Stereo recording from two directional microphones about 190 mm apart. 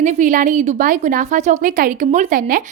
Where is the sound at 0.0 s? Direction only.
40° right (ahead or behind).